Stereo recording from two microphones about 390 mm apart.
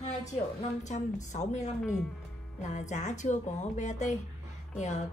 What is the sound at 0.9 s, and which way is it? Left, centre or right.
A woman's voice, centre.